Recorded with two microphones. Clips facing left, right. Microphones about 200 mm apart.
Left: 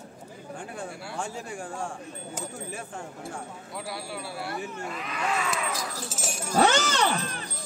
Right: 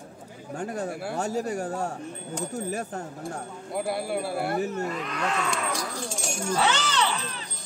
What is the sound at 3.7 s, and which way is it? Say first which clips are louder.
Speech: right 9 dB; 55° right (ahead or behind).